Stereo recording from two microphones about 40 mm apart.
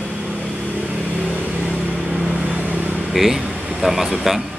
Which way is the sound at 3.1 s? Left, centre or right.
Centre.